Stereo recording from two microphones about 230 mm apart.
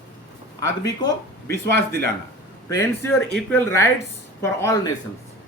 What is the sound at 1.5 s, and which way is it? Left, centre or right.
Speech, right.